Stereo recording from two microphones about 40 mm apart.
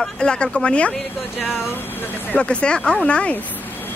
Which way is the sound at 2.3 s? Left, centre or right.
Left.